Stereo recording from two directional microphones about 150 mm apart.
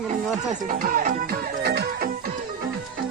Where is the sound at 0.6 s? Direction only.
60° right (ahead or behind); by 2.1 s 90° right.